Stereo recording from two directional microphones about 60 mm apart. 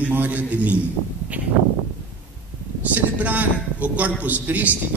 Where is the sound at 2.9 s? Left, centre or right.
Right.